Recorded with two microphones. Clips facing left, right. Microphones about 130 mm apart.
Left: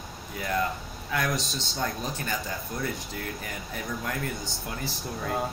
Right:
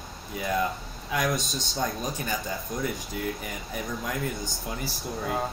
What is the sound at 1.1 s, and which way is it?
Speech, 15° right (ahead or behind).